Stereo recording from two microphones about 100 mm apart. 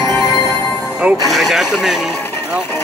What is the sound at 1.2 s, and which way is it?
Speech, centre (ahead or behind).